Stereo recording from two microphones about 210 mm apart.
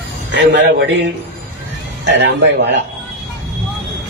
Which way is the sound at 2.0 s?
55° right (ahead or behind).